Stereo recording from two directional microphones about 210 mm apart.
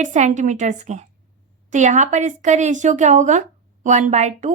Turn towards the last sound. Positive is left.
turn(degrees=-35)  # may be behind; listen again after turning